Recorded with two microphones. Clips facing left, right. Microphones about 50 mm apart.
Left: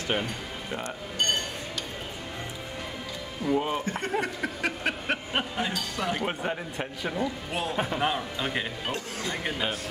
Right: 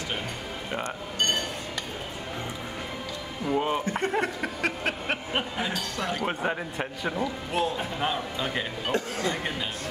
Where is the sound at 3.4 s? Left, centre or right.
Centre.